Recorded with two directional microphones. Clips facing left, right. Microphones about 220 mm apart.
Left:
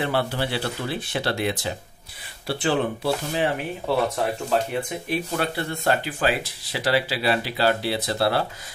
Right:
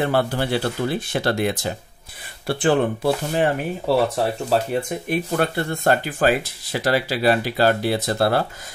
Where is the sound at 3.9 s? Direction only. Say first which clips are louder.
Right 4 dB; 35° right (ahead or behind).